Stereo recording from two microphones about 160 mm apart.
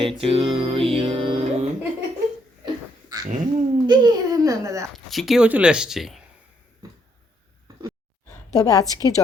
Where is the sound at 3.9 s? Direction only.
25° right (ahead or behind).